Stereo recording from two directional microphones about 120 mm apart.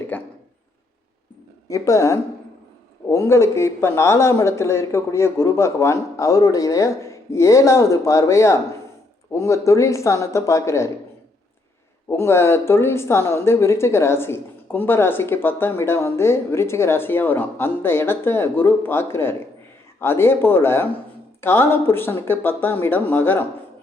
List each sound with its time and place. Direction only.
0.1 s a sound: 15° left (ahead or behind)
1.6 s a woman's voice: 25° left (ahead or behind)
12.0 s a woman's voice: 20° left (ahead or behind)